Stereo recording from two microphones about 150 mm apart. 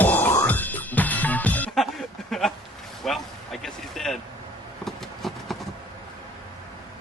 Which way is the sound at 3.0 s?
Centre (ahead or behind).